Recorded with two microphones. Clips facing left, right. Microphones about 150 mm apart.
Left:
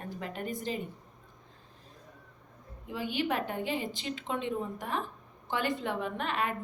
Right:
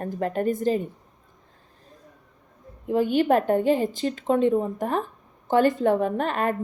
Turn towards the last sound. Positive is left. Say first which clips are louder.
# right 8 dB
turn(degrees=-45)  # may be behind; listen again after turning